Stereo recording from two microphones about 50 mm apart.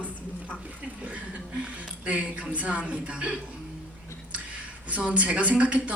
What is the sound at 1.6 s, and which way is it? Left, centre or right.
A woman's voice, right.